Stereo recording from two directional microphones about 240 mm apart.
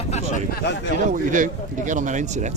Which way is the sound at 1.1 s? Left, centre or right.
Right.